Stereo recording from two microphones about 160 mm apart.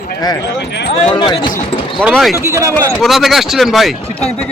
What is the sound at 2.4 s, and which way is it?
Speech, 20° right (ahead or behind).